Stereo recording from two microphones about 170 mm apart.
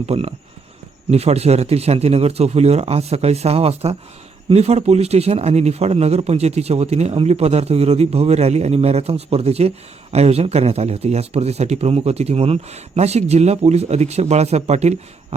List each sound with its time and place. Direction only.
0.0 s speech: 35° right (ahead or behind)